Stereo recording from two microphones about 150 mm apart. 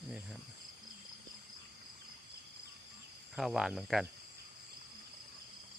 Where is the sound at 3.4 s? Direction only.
Centre (ahead or behind).